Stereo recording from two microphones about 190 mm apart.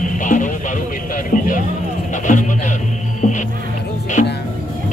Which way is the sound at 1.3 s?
45° left (ahead or behind).